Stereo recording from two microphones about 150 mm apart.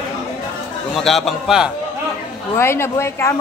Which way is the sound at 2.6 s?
15° left (ahead or behind).